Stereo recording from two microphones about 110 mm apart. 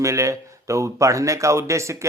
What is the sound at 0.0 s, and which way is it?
A man's voice, 30° right (ahead or behind).